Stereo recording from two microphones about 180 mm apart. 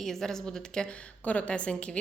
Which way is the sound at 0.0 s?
Centre (ahead or behind).